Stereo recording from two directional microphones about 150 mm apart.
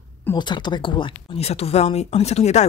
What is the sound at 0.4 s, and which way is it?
Speech, 30° left (ahead or behind).